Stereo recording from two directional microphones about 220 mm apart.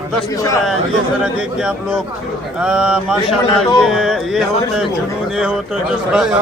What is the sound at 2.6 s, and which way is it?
A man's voice, 5° right (ahead or behind).